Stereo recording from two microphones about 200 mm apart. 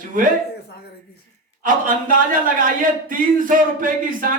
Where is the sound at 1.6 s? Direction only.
40° right (ahead or behind).